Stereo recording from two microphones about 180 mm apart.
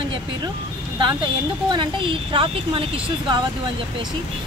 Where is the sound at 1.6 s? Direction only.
25° right (ahead or behind).